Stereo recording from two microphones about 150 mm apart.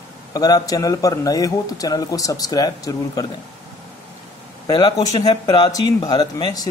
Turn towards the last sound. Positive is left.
turn(degrees=25)  # may be behind; listen again after turning